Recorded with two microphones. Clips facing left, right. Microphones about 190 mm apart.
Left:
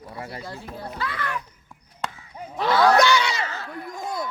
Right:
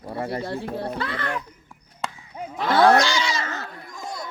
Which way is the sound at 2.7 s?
50° right (ahead or behind).